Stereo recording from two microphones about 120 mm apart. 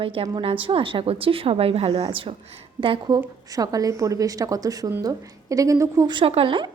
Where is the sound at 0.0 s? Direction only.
50° right (ahead or behind).